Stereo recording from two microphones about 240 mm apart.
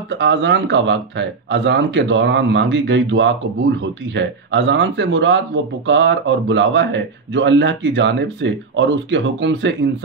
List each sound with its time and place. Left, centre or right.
0.1 s speech: right